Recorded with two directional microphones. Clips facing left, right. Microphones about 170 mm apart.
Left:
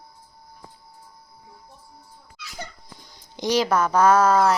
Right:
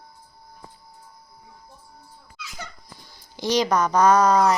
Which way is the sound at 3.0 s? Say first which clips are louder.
Left 1 dB; 20° left (ahead or behind).